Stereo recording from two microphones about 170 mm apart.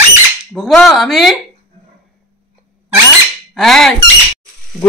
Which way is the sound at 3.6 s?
Centre (ahead or behind).